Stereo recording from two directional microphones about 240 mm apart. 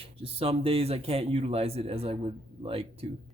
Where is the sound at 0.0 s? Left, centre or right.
Right.